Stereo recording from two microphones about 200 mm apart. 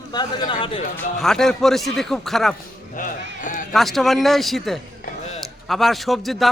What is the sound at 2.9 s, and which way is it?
Speech, 40° left (ahead or behind).